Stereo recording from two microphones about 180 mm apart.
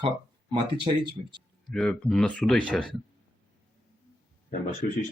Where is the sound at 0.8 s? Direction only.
25° right (ahead or behind).